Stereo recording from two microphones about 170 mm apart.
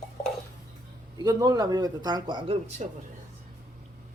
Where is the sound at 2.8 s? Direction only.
40° right (ahead or behind).